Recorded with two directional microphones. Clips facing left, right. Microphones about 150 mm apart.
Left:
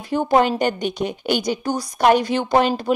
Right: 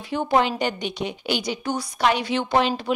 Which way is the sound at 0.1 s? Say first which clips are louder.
Left 4 dB; 45° left (ahead or behind).